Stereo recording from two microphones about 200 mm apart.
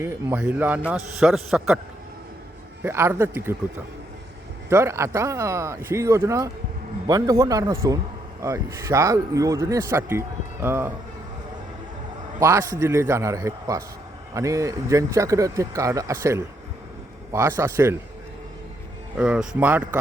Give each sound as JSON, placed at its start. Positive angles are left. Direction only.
{"t": 0.0, "sound": "a man's voice", "side_deg": -10}
{"t": 2.8, "sound": "a man's voice", "side_deg": -10}
{"t": 4.7, "sound": "a man's voice", "side_deg": -15}
{"t": 12.4, "sound": "a man's voice", "side_deg": -15}
{"t": 19.1, "sound": "a man's voice", "side_deg": -5}